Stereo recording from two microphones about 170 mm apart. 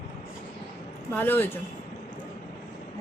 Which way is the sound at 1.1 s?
10° left (ahead or behind).